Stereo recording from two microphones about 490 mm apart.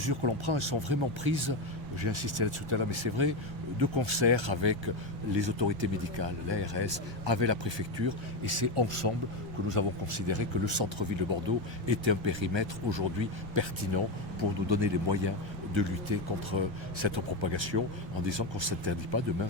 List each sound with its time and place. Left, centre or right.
0.0 s speech: right
8.4 s speech: right